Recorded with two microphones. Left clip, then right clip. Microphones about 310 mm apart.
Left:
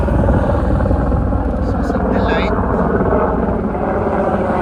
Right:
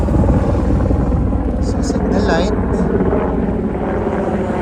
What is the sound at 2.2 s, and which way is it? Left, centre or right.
Vehicle, centre.